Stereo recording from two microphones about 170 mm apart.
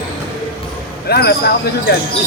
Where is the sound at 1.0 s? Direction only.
70° left (ahead or behind).